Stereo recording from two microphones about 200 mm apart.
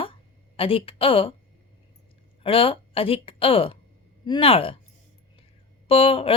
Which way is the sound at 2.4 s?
25° left (ahead or behind).